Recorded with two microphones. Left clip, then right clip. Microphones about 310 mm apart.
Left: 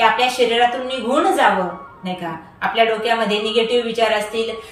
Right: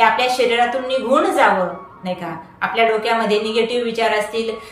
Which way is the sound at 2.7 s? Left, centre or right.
Centre.